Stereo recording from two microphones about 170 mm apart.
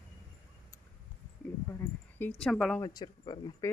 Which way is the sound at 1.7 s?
15° left (ahead or behind).